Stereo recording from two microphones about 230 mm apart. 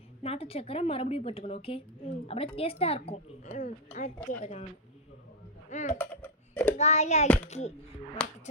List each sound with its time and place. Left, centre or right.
0.2 s a woman's voice: left
5.7 s speech: left
6.0 s a sound: centre
6.7 s a woman's voice: left
8.2 s speech: centre